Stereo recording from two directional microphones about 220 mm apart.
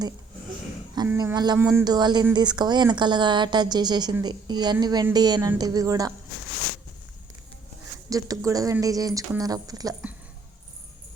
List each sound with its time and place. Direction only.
1.0 s speech: 15° right (ahead or behind)
8.1 s speech: 15° right (ahead or behind)